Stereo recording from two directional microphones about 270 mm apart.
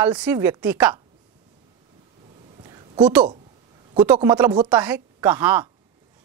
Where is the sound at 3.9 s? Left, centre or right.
Centre.